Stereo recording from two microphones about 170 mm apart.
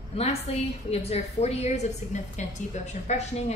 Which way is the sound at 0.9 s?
35° left (ahead or behind).